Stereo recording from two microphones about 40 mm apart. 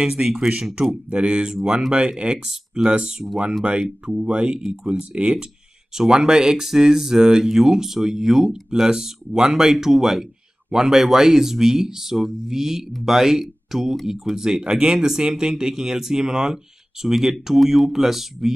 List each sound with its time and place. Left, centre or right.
0.0 s speech: centre